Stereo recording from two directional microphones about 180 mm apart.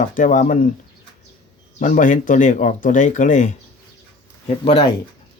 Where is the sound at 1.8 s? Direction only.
45° left (ahead or behind).